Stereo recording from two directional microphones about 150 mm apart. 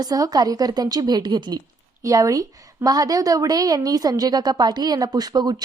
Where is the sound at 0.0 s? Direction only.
25° right (ahead or behind).